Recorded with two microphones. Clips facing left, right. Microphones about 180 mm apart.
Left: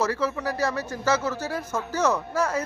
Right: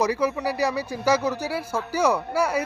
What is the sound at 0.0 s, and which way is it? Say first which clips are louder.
Speech: right 3 dB; 15° right (ahead or behind).